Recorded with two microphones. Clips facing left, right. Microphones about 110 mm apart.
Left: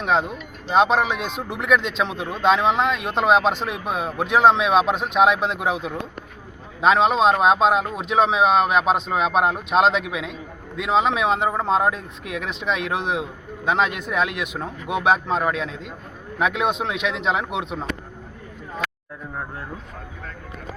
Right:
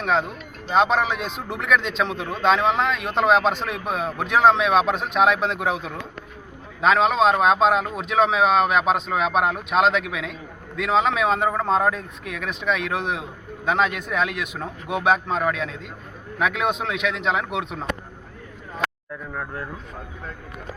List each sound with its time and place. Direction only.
0.0 s speech: 20° left (ahead or behind)